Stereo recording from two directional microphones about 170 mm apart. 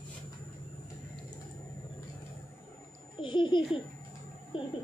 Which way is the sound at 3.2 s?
30° left (ahead or behind).